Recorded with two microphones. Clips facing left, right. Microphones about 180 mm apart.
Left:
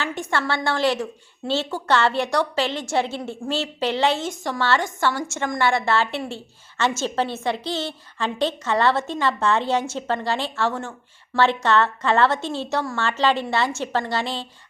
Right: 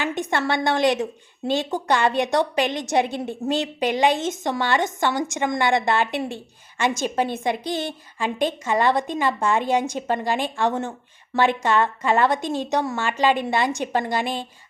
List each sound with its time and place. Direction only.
0.0 s a woman's voice: 20° right (ahead or behind)